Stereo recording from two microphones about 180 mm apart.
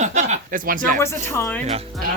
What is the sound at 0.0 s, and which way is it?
Chuckle, 40° right (ahead or behind).